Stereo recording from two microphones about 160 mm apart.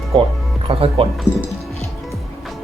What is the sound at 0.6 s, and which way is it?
Speech, 35° right (ahead or behind).